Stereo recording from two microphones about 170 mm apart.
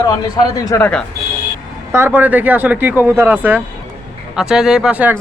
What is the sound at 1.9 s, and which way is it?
Speech, 15° right (ahead or behind).